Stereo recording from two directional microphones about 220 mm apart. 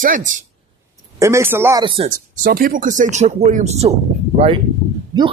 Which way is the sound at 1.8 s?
25° right (ahead or behind).